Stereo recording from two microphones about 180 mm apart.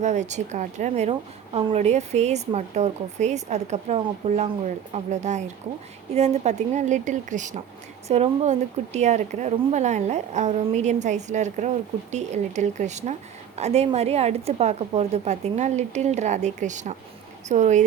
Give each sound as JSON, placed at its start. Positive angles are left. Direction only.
{"t": 0.0, "sound": "speech", "side_deg": -40}